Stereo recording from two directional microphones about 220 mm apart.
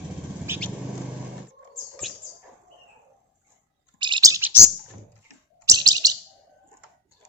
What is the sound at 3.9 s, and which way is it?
Chirp, 20° right (ahead or behind).